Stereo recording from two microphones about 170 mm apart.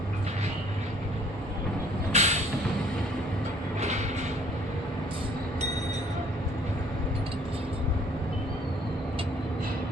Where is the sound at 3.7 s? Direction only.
40° right (ahead or behind).